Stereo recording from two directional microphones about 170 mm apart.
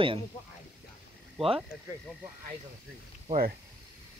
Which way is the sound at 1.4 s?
35° right (ahead or behind).